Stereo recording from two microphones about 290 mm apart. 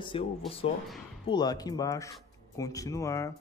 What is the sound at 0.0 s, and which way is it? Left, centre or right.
Speech, centre.